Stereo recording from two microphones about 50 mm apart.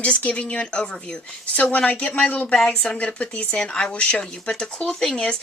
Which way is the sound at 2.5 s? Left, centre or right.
Centre.